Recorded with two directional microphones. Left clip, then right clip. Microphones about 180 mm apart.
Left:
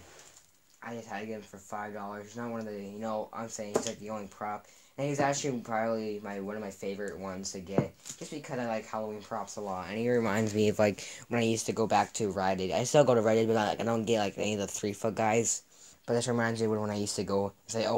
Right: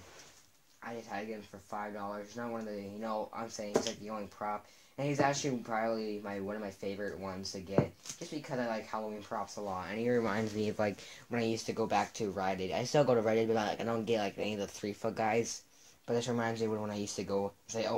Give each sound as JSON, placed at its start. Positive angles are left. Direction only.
{"t": 0.8, "sound": "speech", "side_deg": 50}
{"t": 8.4, "sound": "speech", "side_deg": 50}